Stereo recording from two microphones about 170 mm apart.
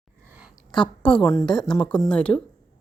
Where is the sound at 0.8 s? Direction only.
30° left (ahead or behind).